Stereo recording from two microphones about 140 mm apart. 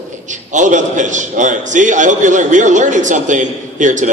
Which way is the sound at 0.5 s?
60° right (ahead or behind).